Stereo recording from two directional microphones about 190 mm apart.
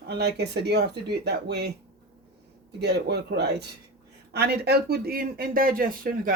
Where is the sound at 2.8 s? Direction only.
60° right (ahead or behind).